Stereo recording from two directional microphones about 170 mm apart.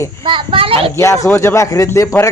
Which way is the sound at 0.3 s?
30° right (ahead or behind).